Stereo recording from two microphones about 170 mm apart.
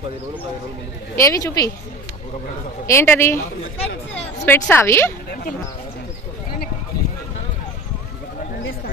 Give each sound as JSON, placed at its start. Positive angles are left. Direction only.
{"t": 1.1, "sound": "a woman's voice", "side_deg": 20}
{"t": 2.9, "sound": "a woman's voice", "side_deg": 15}
{"t": 4.5, "sound": "a woman's voice", "side_deg": 10}